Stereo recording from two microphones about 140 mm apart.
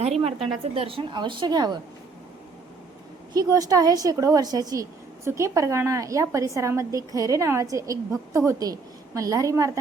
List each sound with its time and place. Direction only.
0.0 s a woman's voice: 50° right (ahead or behind); by 1.8 s 30° right (ahead or behind)
3.3 s a woman's voice: 25° right (ahead or behind)